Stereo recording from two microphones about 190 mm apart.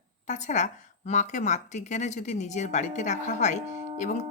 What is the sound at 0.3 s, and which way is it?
Speech, 40° left (ahead or behind).